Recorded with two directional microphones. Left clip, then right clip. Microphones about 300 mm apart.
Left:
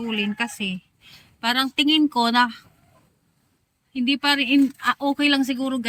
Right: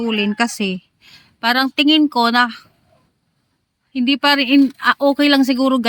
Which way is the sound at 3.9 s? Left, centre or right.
Centre.